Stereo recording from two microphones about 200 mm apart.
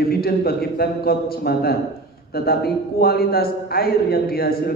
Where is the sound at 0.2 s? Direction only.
50° left (ahead or behind).